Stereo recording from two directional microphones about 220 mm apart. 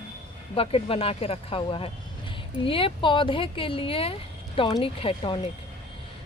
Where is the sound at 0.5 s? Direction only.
25° left (ahead or behind).